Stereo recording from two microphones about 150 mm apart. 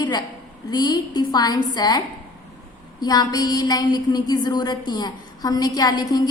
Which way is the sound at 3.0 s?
25° left (ahead or behind).